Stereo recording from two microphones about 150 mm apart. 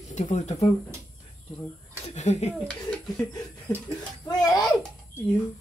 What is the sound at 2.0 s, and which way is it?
Speech, 50° left (ahead or behind).